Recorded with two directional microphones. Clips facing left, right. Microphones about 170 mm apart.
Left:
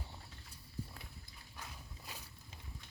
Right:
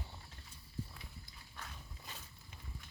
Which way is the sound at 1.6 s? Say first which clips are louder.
Even; 10° left (ahead or behind).